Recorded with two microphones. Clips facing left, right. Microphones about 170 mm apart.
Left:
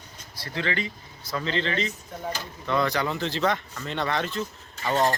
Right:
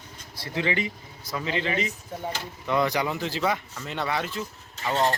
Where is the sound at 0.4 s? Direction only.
15° right (ahead or behind).